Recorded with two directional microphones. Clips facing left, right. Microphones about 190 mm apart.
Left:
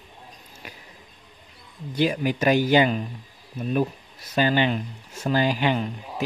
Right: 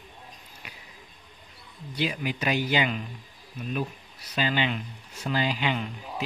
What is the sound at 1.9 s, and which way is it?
Speech, 45° left (ahead or behind).